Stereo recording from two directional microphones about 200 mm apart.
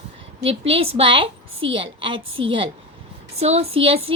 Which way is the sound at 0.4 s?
30° right (ahead or behind).